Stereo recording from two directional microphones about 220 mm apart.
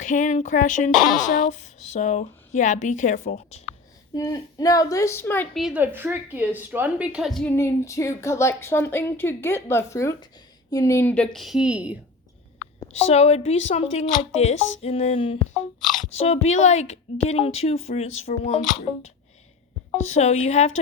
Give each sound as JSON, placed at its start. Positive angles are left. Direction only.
{"t": 0.0, "sound": "speech", "side_deg": 35}
{"t": 4.1, "sound": "a woman's voice", "side_deg": 15}
{"t": 12.8, "sound": "a woman's voice", "side_deg": 30}